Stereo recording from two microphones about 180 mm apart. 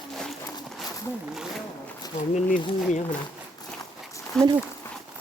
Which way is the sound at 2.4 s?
45° left (ahead or behind).